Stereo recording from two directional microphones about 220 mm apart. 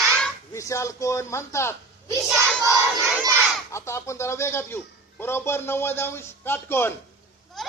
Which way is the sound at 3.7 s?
10° left (ahead or behind).